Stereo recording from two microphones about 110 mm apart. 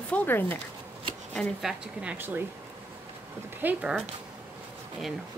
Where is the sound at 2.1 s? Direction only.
20° right (ahead or behind).